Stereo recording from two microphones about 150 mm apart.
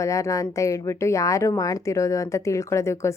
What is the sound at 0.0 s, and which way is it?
A woman's voice, 20° left (ahead or behind).